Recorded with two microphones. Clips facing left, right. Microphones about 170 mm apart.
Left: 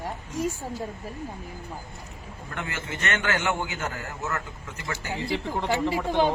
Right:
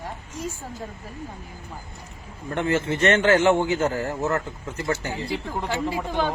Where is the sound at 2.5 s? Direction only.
30° right (ahead or behind).